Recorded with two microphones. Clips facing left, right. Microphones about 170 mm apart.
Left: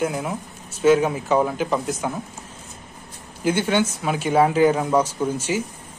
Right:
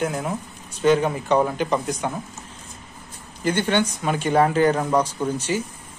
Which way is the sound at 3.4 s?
10° left (ahead or behind).